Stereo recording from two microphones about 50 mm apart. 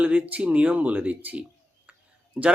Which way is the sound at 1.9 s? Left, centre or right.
Right.